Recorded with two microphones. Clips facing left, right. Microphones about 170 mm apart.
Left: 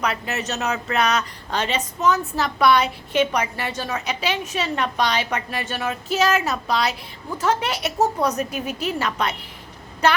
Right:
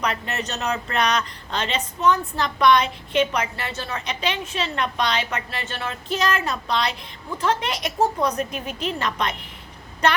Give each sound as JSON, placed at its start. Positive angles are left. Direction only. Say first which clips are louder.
{"t": 0.0, "sound": "a woman's voice", "louder": "left 1 dB", "side_deg": 5}